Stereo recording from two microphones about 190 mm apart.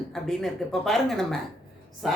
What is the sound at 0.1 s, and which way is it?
A man's voice, centre (ahead or behind).